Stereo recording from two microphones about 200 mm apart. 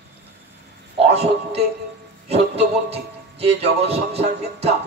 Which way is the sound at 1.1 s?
30° right (ahead or behind).